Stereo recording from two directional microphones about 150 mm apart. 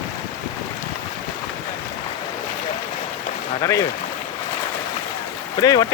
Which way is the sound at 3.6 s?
20° left (ahead or behind).